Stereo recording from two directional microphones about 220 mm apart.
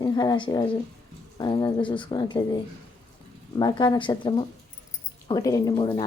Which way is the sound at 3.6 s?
20° left (ahead or behind).